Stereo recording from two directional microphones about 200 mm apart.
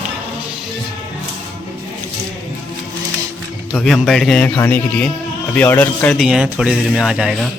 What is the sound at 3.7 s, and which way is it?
Speech, centre (ahead or behind).